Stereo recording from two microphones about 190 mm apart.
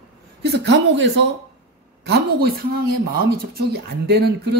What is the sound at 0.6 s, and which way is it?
Speech, 70° right (ahead or behind).